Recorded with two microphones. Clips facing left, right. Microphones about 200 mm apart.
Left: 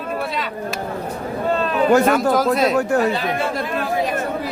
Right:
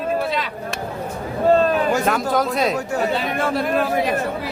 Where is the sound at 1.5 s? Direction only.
40° right (ahead or behind).